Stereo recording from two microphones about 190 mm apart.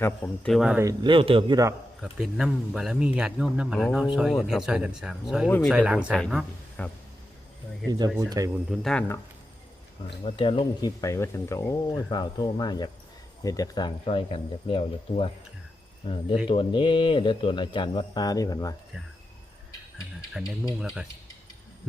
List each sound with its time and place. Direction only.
0.0 s speech: 5° left (ahead or behind)
0.9 s a man's voice: 25° right (ahead or behind)
2.0 s speech: centre (ahead or behind)
5.5 s speech: 10° left (ahead or behind)
5.7 s speech: 5° right (ahead or behind)
7.9 s a man's voice: 20° right (ahead or behind)
8.7 s speech: centre (ahead or behind)
10.2 s speech: 30° left (ahead or behind)
20.4 s speech: 5° right (ahead or behind)